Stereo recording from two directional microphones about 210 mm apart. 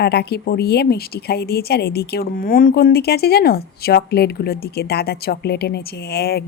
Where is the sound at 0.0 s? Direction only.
50° left (ahead or behind).